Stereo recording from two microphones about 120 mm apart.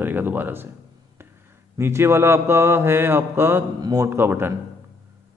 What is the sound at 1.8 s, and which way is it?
A man's voice, 20° right (ahead or behind).